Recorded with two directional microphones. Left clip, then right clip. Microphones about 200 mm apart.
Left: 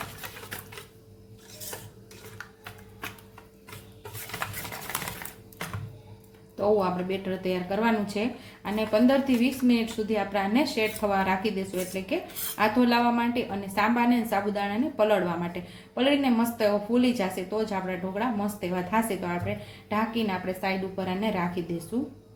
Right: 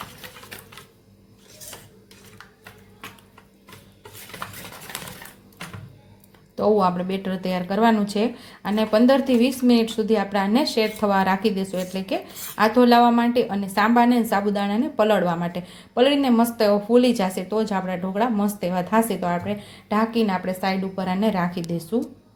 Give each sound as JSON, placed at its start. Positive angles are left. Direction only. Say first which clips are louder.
{"t": 6.6, "sound": "speech", "louder": "right 5 dB", "side_deg": -40}